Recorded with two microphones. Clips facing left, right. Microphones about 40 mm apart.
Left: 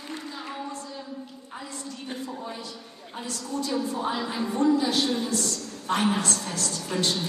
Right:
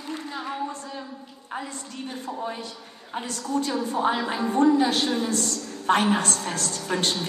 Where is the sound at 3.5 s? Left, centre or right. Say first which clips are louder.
Right 3 dB; right.